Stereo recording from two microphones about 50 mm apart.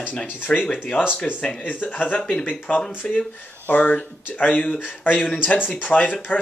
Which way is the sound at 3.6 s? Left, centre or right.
Left.